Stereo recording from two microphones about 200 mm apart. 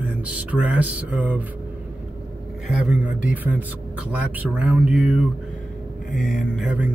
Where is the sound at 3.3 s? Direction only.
10° right (ahead or behind).